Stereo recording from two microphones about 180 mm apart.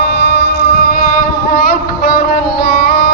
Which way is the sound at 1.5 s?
55° left (ahead or behind).